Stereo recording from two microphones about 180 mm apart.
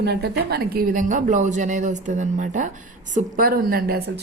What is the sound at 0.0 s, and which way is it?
A woman's voice, 65° right (ahead or behind).